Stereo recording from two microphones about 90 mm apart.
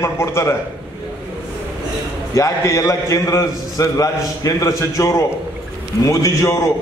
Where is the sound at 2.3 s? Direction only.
35° left (ahead or behind).